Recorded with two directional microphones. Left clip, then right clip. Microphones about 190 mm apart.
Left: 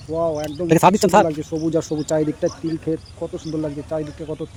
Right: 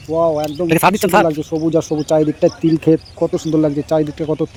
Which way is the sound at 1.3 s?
15° right (ahead or behind).